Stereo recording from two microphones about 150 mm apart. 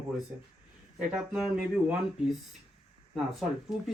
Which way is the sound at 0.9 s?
5° right (ahead or behind).